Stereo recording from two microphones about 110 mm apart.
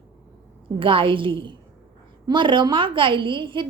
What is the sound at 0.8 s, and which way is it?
A woman's voice, 50° right (ahead or behind).